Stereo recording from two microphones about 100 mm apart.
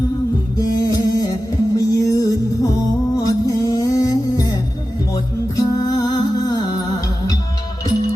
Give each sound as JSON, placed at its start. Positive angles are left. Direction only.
{"t": 0.6, "sound": "music", "side_deg": 35}